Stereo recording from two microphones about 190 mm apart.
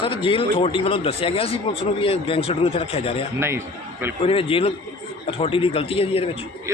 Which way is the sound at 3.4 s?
10° right (ahead or behind).